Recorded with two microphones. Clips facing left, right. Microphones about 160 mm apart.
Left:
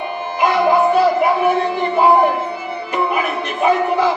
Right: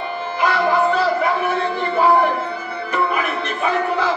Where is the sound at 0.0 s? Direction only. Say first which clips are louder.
Left 2 dB; 15° left (ahead or behind).